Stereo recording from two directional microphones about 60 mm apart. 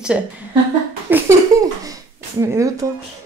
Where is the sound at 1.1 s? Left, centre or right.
Right.